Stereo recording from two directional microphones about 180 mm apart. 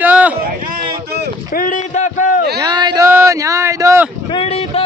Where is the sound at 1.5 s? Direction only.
45° left (ahead or behind).